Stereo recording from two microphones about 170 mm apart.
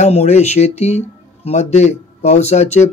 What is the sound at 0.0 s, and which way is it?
Speech, 40° left (ahead or behind).